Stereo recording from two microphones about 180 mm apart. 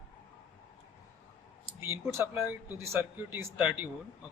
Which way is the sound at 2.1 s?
10° right (ahead or behind).